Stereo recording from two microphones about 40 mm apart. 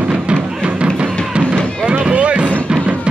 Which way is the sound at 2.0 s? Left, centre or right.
Right.